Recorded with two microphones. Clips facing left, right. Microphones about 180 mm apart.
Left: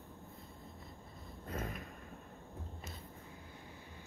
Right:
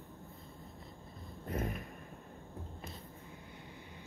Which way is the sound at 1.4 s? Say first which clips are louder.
Right 4 dB; 25° right (ahead or behind).